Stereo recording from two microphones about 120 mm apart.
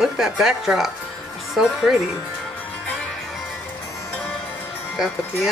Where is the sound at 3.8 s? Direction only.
20° left (ahead or behind).